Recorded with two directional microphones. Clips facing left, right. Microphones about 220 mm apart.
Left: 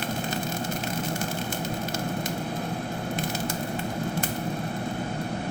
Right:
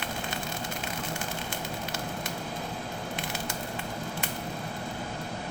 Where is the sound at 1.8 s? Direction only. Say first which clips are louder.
Left 6 dB; 40° left (ahead or behind).